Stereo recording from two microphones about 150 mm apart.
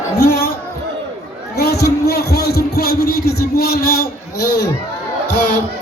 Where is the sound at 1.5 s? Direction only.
90° left.